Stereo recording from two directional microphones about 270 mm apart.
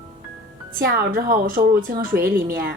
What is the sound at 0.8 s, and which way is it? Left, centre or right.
Speech, right.